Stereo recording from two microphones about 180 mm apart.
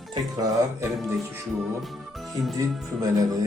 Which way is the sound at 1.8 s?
Centre (ahead or behind).